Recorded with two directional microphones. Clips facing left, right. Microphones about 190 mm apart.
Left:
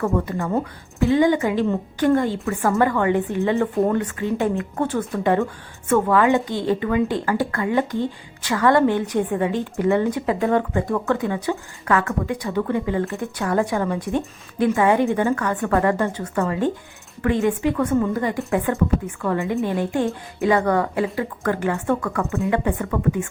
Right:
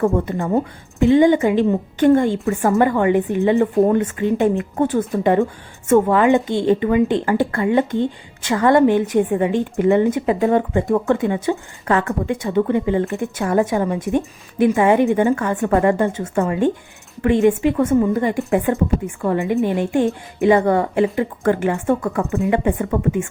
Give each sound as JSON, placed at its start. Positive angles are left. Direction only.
{"t": 0.3, "sound": "a woman's voice", "side_deg": -20}